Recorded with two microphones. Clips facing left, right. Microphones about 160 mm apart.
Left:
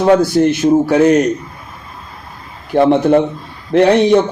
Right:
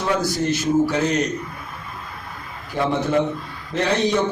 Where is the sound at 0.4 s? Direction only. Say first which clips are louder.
Left 12 dB; 70° left (ahead or behind).